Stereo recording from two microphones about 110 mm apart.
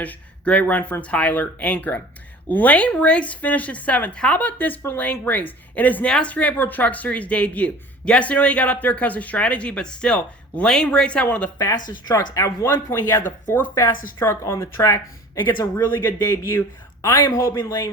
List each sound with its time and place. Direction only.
0.0 s speech: 15° left (ahead or behind)
11.5 s speech: 30° left (ahead or behind)